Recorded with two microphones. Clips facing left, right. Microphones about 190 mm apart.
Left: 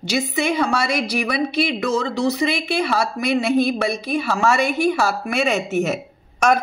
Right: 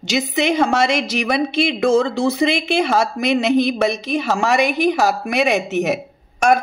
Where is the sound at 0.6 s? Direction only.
25° right (ahead or behind).